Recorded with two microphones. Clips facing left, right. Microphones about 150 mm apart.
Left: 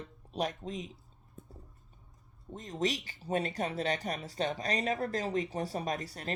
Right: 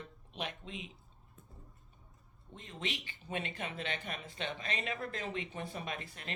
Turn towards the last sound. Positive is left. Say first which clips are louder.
# left 7 dB
turn(degrees=40)  # may be behind; listen again after turning